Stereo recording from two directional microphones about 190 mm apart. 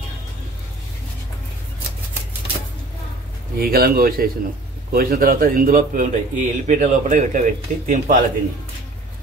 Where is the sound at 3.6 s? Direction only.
50° right (ahead or behind).